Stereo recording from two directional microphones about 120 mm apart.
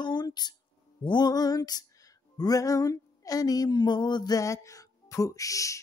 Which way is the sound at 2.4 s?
30° left (ahead or behind).